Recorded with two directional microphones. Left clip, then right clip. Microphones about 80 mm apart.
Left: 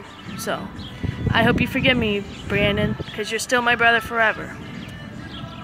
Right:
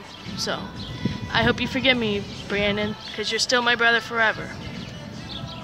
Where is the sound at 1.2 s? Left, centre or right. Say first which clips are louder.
Left 3 dB; centre.